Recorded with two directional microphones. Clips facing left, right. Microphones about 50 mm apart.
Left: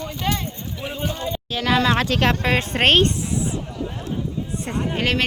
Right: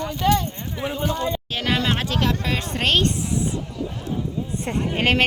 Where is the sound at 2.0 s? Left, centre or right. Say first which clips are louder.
Left 4 dB; left.